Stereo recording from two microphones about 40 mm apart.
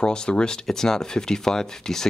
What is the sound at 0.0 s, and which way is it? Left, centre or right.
Speech, left.